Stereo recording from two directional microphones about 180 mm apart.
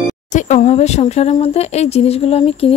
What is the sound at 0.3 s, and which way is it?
Speech, 40° left (ahead or behind).